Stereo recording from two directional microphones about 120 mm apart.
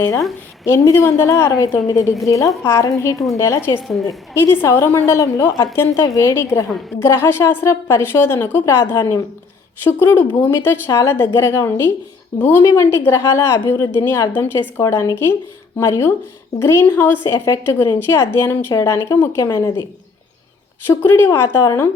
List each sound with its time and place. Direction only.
0.6 s a woman's voice: 20° left (ahead or behind)
3.8 s a woman's voice: centre (ahead or behind)
4.0 s a woman's voice: 20° left (ahead or behind)
20.8 s a woman's voice: 20° left (ahead or behind)